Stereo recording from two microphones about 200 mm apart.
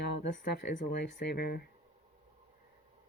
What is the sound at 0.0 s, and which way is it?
Speech, 55° left (ahead or behind).